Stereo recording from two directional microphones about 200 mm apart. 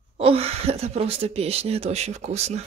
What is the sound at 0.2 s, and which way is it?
Speech, 30° right (ahead or behind).